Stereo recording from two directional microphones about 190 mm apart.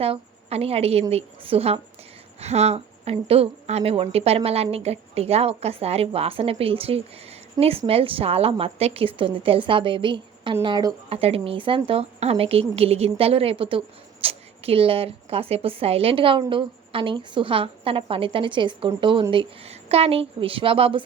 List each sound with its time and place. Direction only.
0.0 s a woman's voice: 30° right (ahead or behind)